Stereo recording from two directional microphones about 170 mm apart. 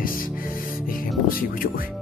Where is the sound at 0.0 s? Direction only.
55° left (ahead or behind).